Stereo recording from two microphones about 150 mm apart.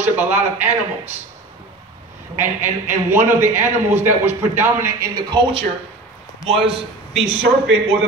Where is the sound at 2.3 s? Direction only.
15° right (ahead or behind).